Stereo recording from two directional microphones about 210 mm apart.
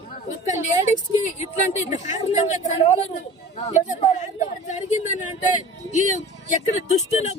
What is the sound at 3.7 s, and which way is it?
Speech, 35° left (ahead or behind).